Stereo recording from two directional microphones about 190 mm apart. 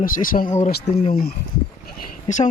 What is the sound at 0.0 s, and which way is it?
Speech, 45° left (ahead or behind).